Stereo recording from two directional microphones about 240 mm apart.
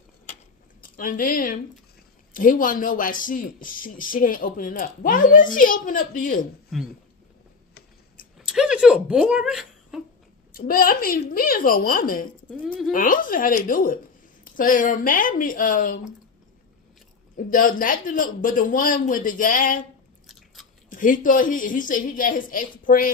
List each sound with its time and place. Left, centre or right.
0.9 s speech: left
6.7 s speech: centre
8.4 s a sound: centre
10.5 s speech: left
17.4 s speech: left
20.2 s biting: centre
20.9 s speech: left